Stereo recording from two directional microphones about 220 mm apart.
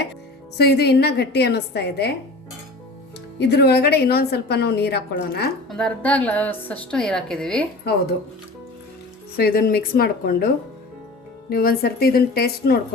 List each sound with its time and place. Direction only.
0.5 s a woman's voice: 50° left (ahead or behind)
3.3 s a woman's voice: 50° left (ahead or behind)
5.6 s a woman's voice: 5° left (ahead or behind)
7.9 s a woman's voice: 45° left (ahead or behind)
9.4 s a woman's voice: 45° left (ahead or behind)